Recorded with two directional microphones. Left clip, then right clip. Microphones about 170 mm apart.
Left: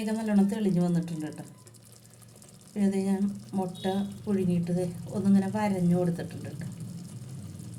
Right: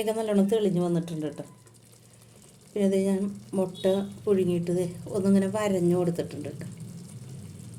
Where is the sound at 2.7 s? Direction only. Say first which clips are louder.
Right 5 dB; 50° right (ahead or behind).